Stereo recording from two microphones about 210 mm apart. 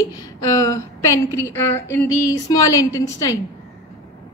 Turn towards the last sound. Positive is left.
turn(degrees=15)  # may be behind; listen again after turning